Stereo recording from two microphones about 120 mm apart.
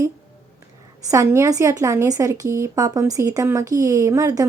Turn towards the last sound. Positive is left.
turn(degrees=-30)  # may be behind; listen again after turning